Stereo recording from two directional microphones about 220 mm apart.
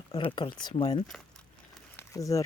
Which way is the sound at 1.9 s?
15° left (ahead or behind).